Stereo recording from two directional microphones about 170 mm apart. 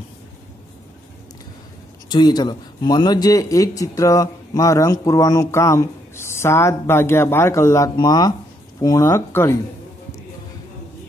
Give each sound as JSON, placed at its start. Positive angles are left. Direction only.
{"t": 2.0, "sound": "a man's voice", "side_deg": 25}